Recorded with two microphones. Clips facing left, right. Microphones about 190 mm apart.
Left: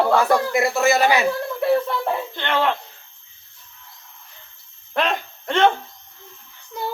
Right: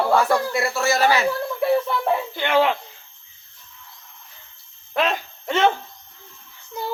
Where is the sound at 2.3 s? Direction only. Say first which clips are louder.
Right 3 dB; 10° right (ahead or behind).